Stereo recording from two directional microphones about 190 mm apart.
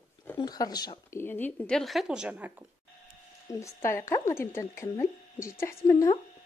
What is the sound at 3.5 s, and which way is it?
Speech, 15° left (ahead or behind).